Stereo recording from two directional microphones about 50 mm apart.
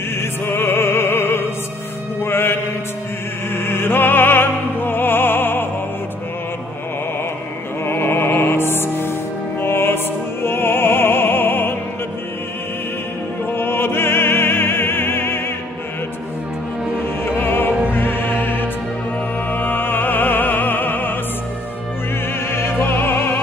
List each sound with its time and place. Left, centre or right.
0.2 s music: left
7.8 s music: left
13.5 s opera: left
17.2 s music: left
22.5 s music: left